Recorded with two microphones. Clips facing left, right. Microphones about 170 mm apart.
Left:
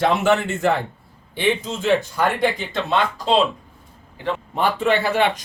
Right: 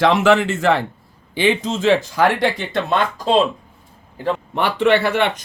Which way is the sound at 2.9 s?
45° right (ahead or behind).